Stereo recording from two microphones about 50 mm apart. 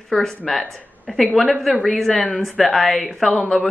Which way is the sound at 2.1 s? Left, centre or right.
Left.